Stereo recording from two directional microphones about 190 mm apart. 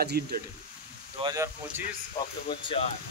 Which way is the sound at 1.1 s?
20° right (ahead or behind).